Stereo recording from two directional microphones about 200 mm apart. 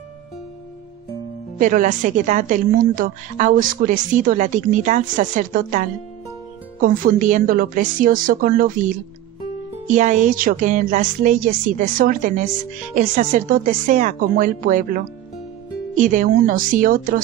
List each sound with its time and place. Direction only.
1.6 s a woman's voice: 40° right (ahead or behind)